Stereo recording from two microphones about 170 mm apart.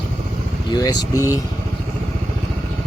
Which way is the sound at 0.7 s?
20° left (ahead or behind).